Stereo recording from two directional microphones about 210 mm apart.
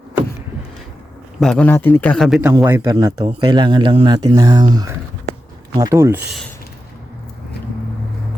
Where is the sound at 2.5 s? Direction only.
15° right (ahead or behind).